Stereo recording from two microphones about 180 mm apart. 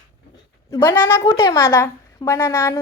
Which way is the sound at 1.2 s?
20° left (ahead or behind).